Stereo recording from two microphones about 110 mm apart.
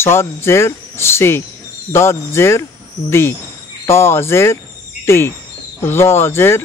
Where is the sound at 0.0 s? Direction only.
25° left (ahead or behind).